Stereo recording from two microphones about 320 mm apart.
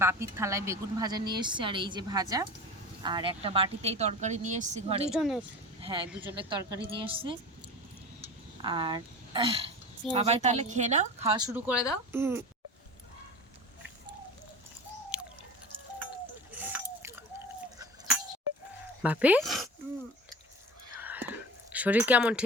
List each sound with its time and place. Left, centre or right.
0.0 s a woman's voice: centre
5.1 s speech: centre
5.8 s speech: centre
6.1 s a woman's voice: centre
15.1 s a sound: centre
16.6 s a sound: centre
19.0 s speech: centre
21.0 s whispering: centre